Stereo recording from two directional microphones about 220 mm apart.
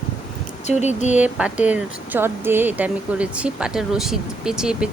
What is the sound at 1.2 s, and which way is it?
Speech, 5° right (ahead or behind).